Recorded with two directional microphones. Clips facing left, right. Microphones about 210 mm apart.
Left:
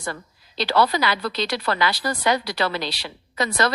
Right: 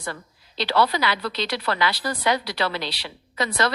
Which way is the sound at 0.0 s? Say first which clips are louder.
Left 2 dB; 45° left (ahead or behind).